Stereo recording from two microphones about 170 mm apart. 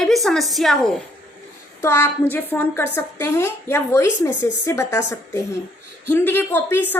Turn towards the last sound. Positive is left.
turn(degrees=10)  # may be behind; listen again after turning